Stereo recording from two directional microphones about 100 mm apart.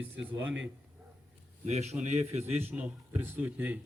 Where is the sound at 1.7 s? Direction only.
90° right.